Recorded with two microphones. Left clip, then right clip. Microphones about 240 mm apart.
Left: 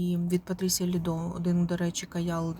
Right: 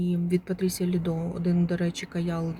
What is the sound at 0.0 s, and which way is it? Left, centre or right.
Speech, centre.